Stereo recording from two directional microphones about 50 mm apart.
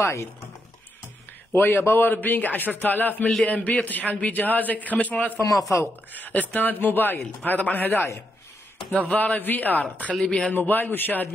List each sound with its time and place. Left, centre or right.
0.0 s speech: left
1.5 s a man's voice: left
7.9 s a man's voice: left
8.9 s a man's voice: left
10.2 s speech: left
10.5 s a man's voice: left